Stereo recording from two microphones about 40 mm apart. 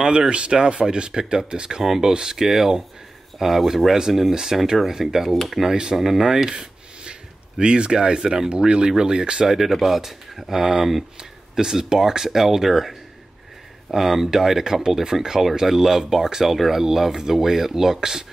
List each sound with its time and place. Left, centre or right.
0.0 s speech: right
9.6 s speech: centre
13.9 s speech: centre